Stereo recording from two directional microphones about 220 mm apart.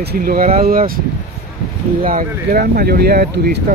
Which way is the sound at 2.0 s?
40° right (ahead or behind).